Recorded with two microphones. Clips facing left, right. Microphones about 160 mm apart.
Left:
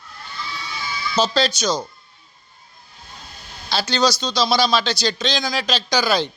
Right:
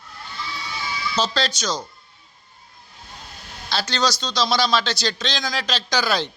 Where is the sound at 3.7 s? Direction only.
5° left (ahead or behind).